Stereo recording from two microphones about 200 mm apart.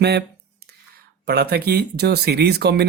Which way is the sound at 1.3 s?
55° right (ahead or behind).